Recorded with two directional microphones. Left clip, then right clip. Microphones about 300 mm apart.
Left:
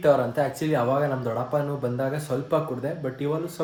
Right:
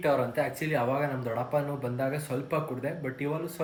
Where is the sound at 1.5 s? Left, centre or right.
Centre.